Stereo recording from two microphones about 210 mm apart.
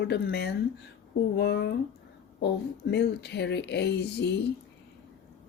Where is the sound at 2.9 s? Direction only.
55° left (ahead or behind).